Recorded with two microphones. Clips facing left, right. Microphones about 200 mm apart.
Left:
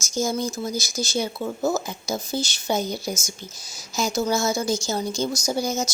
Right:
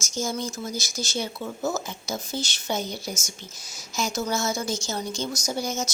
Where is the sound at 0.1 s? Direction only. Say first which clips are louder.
Left 4 dB; 35° left (ahead or behind).